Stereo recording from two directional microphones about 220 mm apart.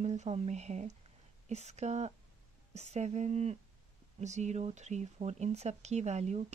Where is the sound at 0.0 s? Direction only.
30° right (ahead or behind).